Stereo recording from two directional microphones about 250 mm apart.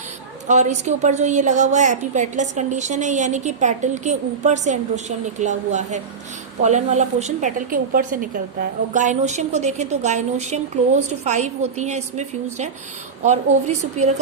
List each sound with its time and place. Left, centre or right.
0.4 s a woman's voice: right